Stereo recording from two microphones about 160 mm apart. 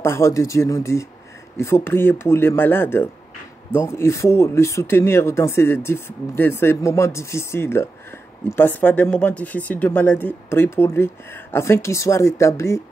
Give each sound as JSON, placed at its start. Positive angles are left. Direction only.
{"t": 0.0, "sound": "speech", "side_deg": 15}